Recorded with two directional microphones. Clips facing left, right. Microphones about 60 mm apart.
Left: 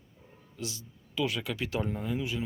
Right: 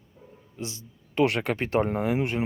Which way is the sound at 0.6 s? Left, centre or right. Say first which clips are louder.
Right 3 dB; right.